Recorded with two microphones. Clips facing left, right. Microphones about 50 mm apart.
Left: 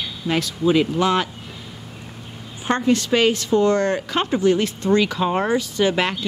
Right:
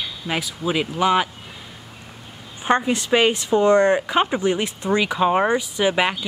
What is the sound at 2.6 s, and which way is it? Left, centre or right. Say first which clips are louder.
A woman's voice: even; centre.